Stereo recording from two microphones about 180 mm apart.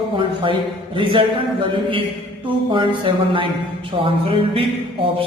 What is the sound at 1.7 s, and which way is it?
A man's voice, 30° right (ahead or behind).